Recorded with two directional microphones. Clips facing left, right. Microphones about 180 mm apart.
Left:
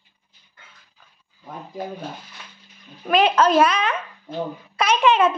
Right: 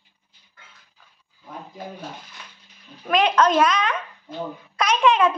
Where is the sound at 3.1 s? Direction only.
5° left (ahead or behind).